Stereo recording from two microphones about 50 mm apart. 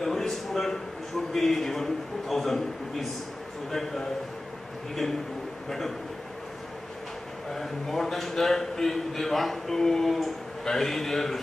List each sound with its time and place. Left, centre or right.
0.0 s a sound: centre
1.3 s a man's voice: centre
5.7 s a man's voice: centre
7.5 s a man's voice: centre